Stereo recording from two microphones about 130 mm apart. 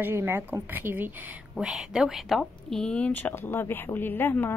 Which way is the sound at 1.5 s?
5° right (ahead or behind).